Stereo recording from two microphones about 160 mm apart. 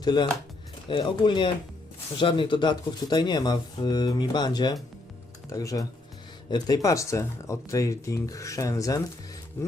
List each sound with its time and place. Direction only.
0.0 s speech: 25° left (ahead or behind)